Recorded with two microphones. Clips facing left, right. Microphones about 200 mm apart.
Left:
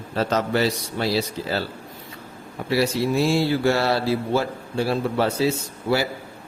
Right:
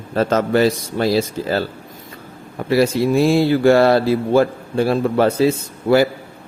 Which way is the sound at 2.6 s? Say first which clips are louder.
Right 6 dB; 50° right (ahead or behind).